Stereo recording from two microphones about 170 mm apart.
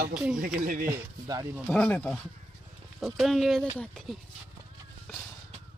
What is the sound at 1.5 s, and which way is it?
A man's voice, centre (ahead or behind).